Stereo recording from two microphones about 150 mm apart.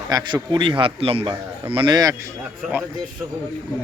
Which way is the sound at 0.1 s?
25° right (ahead or behind).